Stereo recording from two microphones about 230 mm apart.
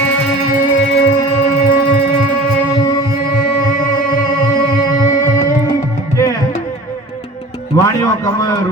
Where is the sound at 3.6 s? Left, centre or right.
Left.